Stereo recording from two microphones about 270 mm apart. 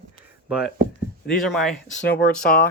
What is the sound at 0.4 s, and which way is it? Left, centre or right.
Speech, centre.